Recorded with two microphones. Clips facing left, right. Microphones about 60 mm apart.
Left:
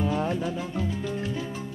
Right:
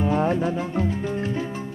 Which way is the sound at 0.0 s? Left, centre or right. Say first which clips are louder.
Right 5 dB; right.